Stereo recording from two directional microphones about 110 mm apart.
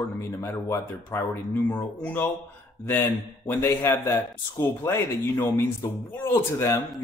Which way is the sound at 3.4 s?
20° left (ahead or behind).